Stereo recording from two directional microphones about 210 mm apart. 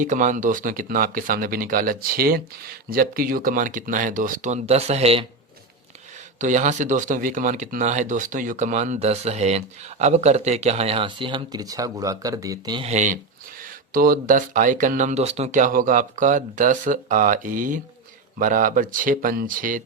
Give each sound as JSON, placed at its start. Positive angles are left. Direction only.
{"t": 0.0, "sound": "speech", "side_deg": -35}
{"t": 6.4, "sound": "speech", "side_deg": -35}
{"t": 12.9, "sound": "speech", "side_deg": -35}